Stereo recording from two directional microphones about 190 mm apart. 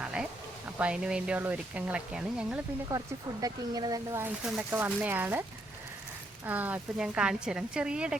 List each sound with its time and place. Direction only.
0.0 s a sound: 5° right (ahead or behind)
0.8 s speech: 5° right (ahead or behind)
3.4 s speech: 20° right (ahead or behind)
4.4 s speech: 5° right (ahead or behind)